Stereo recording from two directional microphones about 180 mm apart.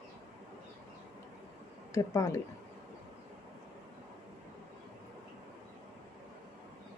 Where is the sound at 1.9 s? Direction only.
15° left (ahead or behind).